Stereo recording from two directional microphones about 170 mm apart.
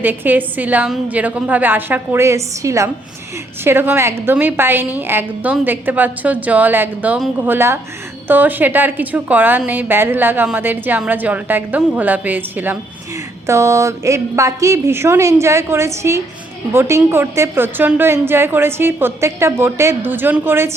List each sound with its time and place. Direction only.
0.0 s a woman's voice: 10° right (ahead or behind)